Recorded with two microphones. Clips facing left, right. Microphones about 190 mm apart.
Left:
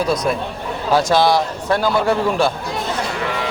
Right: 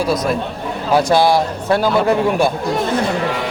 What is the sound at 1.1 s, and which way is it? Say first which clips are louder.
A man's voice: right 2 dB; 10° right (ahead or behind).